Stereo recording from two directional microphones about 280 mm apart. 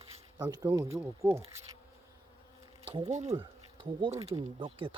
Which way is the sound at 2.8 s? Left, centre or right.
Centre.